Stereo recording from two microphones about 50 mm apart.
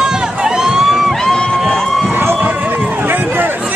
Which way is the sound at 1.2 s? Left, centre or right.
Centre.